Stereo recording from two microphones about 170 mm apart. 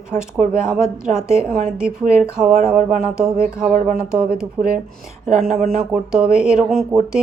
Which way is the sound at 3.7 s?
55° right (ahead or behind).